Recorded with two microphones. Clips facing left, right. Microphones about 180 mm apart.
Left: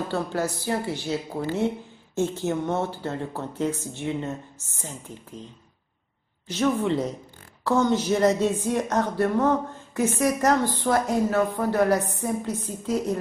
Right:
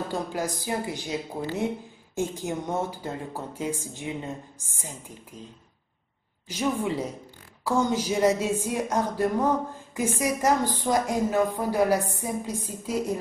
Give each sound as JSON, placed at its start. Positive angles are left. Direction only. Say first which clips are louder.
{"t": 0.1, "sound": "a woman's voice", "louder": "left 3 dB", "side_deg": -15}
{"t": 2.1, "sound": "a woman's voice", "louder": "left 4 dB", "side_deg": -15}
{"t": 6.4, "sound": "a woman's voice", "louder": "left 4 dB", "side_deg": -10}